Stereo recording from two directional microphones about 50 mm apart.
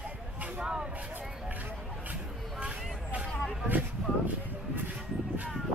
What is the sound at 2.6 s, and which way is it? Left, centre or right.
Vehicle, right.